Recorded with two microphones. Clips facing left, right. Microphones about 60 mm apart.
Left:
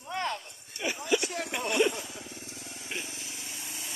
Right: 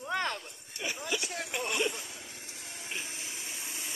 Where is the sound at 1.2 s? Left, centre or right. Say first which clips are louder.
Left 4 dB; left.